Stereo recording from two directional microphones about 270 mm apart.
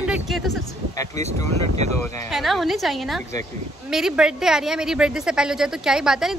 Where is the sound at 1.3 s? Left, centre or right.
Right.